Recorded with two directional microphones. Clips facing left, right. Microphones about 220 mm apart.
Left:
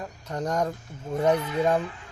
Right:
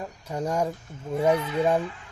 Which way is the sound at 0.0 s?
10° right (ahead or behind).